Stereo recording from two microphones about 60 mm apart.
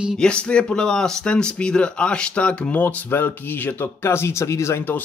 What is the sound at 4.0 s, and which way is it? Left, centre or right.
Speech, left.